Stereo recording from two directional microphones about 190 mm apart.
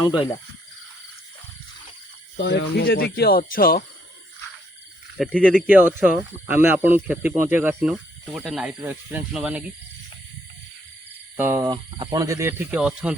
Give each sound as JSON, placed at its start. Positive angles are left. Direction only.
{"t": 0.0, "sound": "speech", "side_deg": 25}
{"t": 2.3, "sound": "speech", "side_deg": 65}
{"t": 5.1, "sound": "speech", "side_deg": 5}
{"t": 11.3, "sound": "speech", "side_deg": -15}